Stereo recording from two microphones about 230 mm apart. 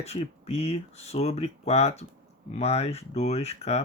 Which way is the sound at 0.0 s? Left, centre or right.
Left.